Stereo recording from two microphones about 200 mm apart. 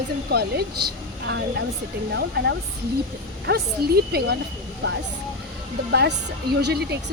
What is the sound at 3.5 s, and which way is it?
Speech, 50° right (ahead or behind).